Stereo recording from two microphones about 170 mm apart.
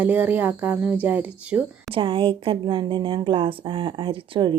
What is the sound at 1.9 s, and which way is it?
Speech, 30° right (ahead or behind).